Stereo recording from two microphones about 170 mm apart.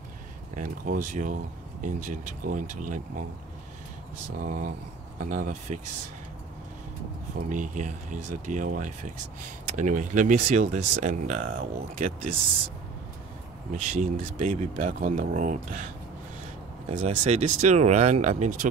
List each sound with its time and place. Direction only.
0.6 s speech: 50° right (ahead or behind)
4.4 s speech: 55° right (ahead or behind)
7.4 s speech: 50° right (ahead or behind)
13.7 s speech: 45° right (ahead or behind)
17.0 s speech: 40° right (ahead or behind)